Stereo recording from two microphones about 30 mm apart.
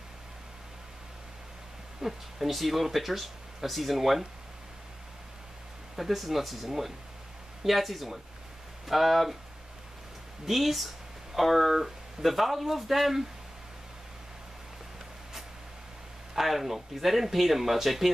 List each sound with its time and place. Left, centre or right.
2.0 s speech: centre
5.9 s speech: centre
10.5 s speech: centre
16.3 s speech: centre